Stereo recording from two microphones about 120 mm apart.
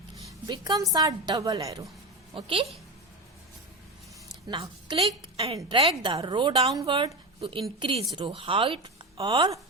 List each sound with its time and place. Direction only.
0.4 s a woman's voice: 35° right (ahead or behind)
2.3 s a woman's voice: 45° right (ahead or behind)
4.4 s a woman's voice: 40° right (ahead or behind); by 6.0 s 55° right (ahead or behind)
6.0 s a woman's voice: 40° right (ahead or behind)
6.5 s speech: 55° right (ahead or behind)
6.8 s a woman's voice: 45° right (ahead or behind)